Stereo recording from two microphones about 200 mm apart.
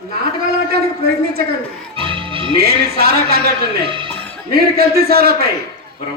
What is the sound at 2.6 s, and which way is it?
A man's voice, 50° right (ahead or behind).